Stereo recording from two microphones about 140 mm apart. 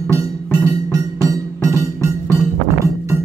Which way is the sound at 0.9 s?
25° right (ahead or behind).